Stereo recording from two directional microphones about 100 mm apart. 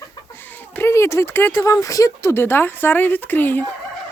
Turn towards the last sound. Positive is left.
turn(degrees=20)  # may be behind; listen again after turning